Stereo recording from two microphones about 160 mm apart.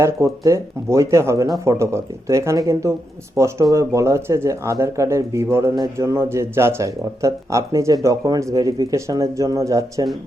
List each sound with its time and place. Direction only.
0.0 s speech: 20° right (ahead or behind)